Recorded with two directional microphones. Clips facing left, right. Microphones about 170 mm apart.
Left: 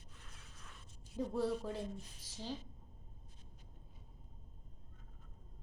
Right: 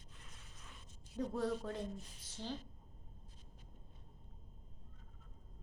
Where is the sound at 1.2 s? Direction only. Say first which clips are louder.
Left 1 dB; 10° left (ahead or behind).